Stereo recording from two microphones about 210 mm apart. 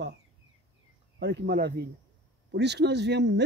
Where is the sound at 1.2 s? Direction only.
50° right (ahead or behind).